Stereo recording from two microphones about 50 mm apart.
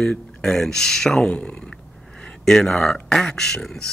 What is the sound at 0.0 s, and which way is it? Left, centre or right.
Speech, centre.